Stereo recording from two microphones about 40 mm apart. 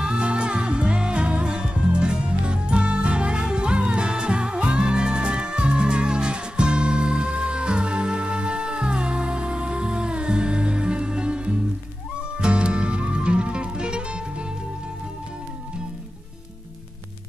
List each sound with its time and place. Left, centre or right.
0.0 s music: right